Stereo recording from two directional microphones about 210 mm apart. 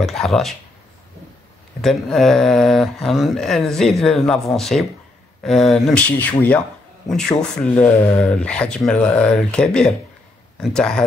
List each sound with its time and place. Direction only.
0.0 s speech: centre (ahead or behind)
1.8 s speech: centre (ahead or behind)